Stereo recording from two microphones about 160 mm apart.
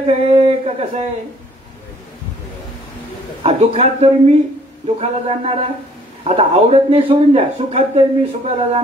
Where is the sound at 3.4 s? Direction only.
40° right (ahead or behind).